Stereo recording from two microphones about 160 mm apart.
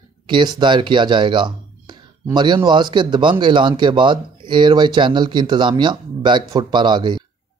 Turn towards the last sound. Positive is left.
turn(degrees=-30)  # may be behind; listen again after turning